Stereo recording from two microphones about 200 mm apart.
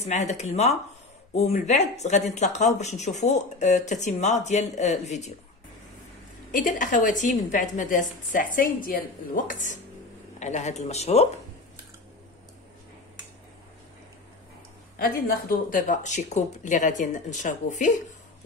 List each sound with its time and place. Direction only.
0.0 s speech: 35° left (ahead or behind)
6.5 s speech: 40° left (ahead or behind)
15.0 s speech: 45° left (ahead or behind)